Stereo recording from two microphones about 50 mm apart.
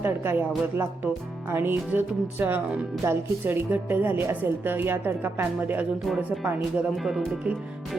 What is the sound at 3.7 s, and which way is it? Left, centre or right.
Music, right.